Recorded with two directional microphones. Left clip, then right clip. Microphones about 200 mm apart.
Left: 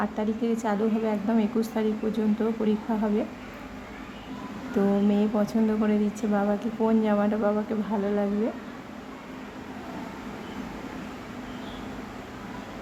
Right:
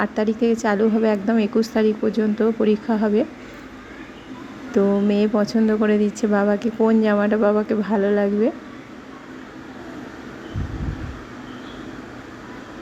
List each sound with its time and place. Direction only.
0.0 s a woman's voice: 20° right (ahead or behind)
4.7 s a woman's voice: 20° right (ahead or behind)